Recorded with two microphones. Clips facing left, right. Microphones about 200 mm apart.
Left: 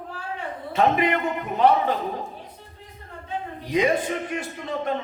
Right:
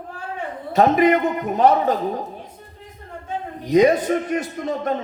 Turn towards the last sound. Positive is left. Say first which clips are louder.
# right 5 dB
turn(degrees=-40)  # may be behind; listen again after turning